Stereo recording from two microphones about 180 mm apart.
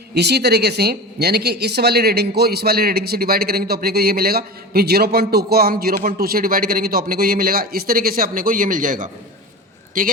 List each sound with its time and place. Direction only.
0.1 s a man's voice: 70° right (ahead or behind); by 10.1 s 50° right (ahead or behind)